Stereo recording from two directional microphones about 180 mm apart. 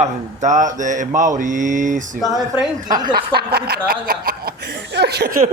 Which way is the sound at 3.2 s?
60° right (ahead or behind).